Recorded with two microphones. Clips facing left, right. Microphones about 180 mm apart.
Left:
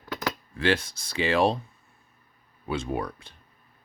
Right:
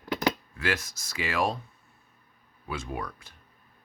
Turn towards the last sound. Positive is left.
turn(degrees=30)  # may be behind; listen again after turning